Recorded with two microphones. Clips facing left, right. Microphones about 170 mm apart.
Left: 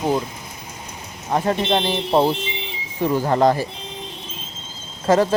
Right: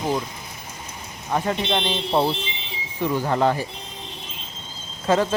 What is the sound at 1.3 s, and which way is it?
Speech, 40° left (ahead or behind).